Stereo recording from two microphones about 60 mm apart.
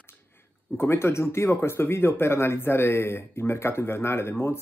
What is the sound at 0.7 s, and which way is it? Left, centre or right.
Speech, left.